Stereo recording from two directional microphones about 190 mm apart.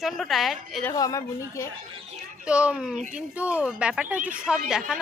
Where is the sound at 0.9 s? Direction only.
20° left (ahead or behind).